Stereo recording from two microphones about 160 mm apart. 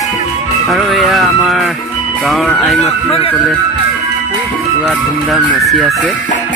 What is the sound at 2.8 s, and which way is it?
Speech, 40° left (ahead or behind).